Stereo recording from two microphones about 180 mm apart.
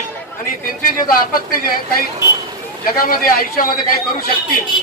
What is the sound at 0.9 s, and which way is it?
A man's voice, 50° left (ahead or behind).